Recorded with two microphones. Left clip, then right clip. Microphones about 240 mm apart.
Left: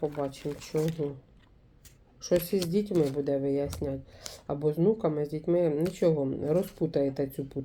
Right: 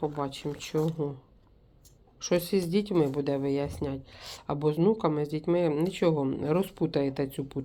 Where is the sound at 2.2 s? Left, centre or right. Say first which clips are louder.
Even; centre.